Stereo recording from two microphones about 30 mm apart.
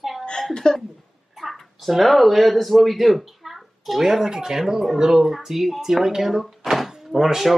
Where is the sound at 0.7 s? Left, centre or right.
Left.